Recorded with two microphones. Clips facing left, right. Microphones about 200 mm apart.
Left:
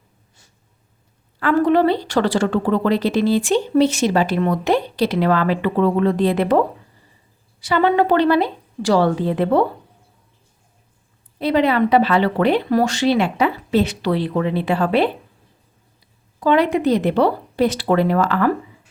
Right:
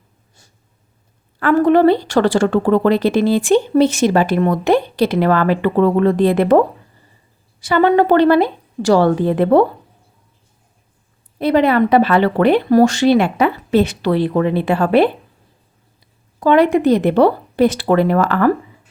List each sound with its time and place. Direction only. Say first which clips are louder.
1.4 s speech: right 4 dB; 50° right (ahead or behind)
7.6 s speech: right 4 dB; 50° right (ahead or behind)
11.3 s speech: right 3 dB; 50° right (ahead or behind)
16.4 s speech: right 4 dB; 50° right (ahead or behind)